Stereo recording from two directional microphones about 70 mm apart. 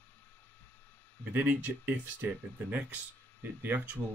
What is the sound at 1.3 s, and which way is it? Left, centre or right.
Speech, right.